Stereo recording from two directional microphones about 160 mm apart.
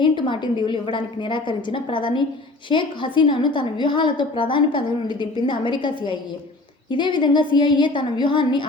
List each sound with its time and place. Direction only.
0.0 s a woman's voice: 30° left (ahead or behind)